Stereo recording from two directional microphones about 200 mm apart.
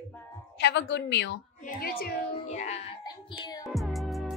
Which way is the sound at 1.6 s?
45° left (ahead or behind).